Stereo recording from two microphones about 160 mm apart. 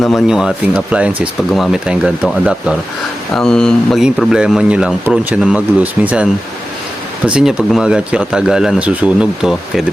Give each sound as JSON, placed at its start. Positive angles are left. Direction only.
{"t": 0.0, "sound": "speech", "side_deg": 0}
{"t": 3.3, "sound": "speech", "side_deg": 5}
{"t": 7.3, "sound": "speech", "side_deg": -5}